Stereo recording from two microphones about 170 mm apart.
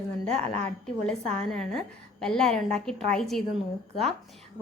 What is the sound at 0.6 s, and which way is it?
A woman's voice, 5° left (ahead or behind).